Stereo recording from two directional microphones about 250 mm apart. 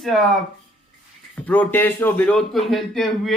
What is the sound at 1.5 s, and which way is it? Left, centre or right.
A man's voice, centre.